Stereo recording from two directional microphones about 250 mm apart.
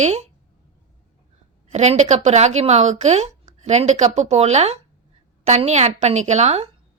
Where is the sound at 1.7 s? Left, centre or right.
Right.